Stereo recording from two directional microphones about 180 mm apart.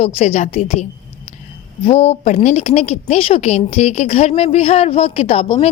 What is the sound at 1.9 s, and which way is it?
Speech, 35° left (ahead or behind).